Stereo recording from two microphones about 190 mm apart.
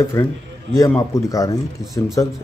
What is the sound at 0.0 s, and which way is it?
Speech, 15° left (ahead or behind).